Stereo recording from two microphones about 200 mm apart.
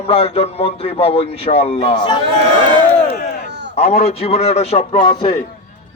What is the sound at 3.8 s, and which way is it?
A man's voice, 35° left (ahead or behind).